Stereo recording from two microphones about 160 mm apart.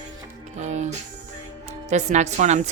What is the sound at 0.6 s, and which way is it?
Music, 45° right (ahead or behind).